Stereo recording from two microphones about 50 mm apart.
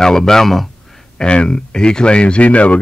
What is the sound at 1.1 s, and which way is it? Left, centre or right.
Speech, centre.